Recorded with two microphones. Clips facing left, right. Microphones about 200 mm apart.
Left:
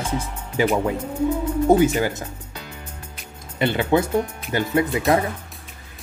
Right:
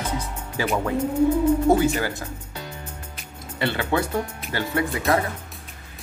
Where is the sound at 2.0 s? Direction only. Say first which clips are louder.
Left 4 dB; 20° left (ahead or behind).